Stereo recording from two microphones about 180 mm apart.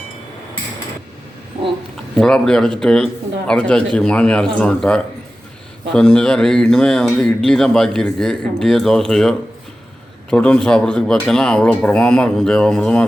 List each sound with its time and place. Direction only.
2.1 s speech: centre (ahead or behind)